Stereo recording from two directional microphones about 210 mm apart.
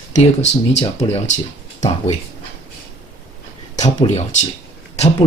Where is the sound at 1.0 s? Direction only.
30° left (ahead or behind).